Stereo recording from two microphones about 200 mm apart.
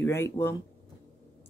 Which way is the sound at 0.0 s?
10° left (ahead or behind).